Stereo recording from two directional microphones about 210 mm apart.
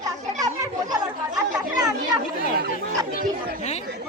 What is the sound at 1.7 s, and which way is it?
Chatter, 15° right (ahead or behind).